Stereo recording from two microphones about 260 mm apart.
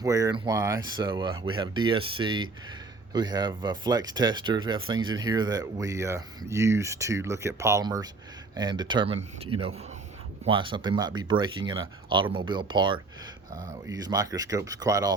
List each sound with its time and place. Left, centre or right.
0.0 s speech: centre